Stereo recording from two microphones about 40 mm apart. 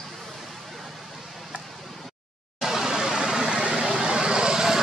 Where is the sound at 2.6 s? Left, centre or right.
Centre.